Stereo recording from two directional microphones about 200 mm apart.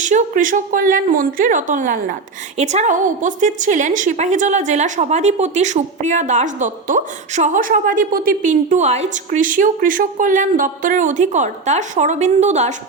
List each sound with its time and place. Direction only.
0.0 s a woman's voice: 40° right (ahead or behind)